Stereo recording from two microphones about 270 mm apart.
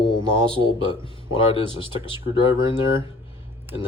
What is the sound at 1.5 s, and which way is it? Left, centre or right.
Speech, centre.